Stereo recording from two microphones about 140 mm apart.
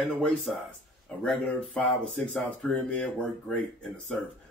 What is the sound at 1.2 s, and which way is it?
Speech, 10° left (ahead or behind).